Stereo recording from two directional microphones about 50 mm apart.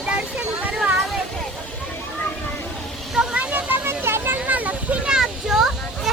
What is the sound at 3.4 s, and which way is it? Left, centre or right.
Vehicle, right.